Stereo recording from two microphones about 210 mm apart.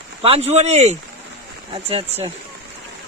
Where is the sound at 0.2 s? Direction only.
30° right (ahead or behind).